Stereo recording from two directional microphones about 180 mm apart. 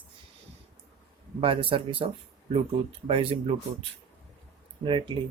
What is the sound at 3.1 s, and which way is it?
Speech, 30° right (ahead or behind).